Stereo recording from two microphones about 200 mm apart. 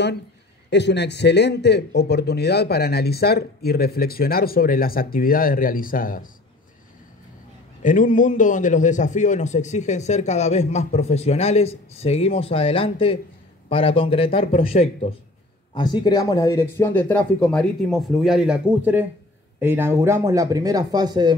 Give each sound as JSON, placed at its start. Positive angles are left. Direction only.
{"t": 0.7, "sound": "speech", "side_deg": 60}
{"t": 7.8, "sound": "a man's voice", "side_deg": 40}